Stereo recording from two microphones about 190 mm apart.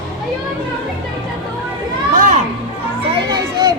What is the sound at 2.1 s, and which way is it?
Children playing, 40° right (ahead or behind).